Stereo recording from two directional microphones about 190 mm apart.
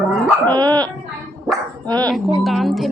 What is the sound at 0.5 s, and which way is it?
Dog, 20° right (ahead or behind).